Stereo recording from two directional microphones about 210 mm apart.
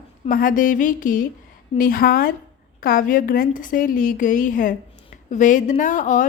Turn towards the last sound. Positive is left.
turn(degrees=40)  # may be behind; listen again after turning